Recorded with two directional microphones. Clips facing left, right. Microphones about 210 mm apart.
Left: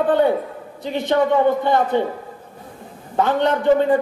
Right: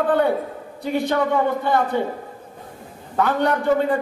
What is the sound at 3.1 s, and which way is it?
Speech, 20° left (ahead or behind).